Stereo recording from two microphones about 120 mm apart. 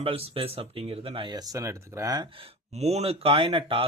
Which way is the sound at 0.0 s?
50° right (ahead or behind).